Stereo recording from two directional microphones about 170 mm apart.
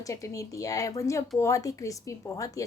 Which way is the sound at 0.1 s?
20° left (ahead or behind).